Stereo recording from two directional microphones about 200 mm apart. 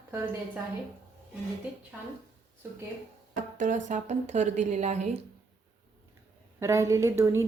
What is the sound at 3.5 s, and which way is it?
A woman's voice, 40° right (ahead or behind).